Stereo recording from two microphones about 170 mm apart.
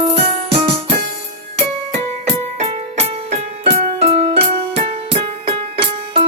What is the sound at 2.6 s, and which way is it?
Music, 35° right (ahead or behind).